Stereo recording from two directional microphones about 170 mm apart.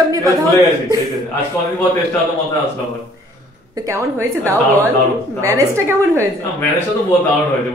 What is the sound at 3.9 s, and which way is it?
Speech, 15° right (ahead or behind).